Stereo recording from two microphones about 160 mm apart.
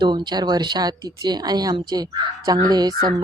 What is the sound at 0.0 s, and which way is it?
Speech, 30° right (ahead or behind).